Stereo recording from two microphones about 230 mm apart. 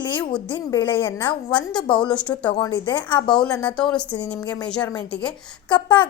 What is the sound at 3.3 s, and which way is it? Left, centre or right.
A woman's voice, centre.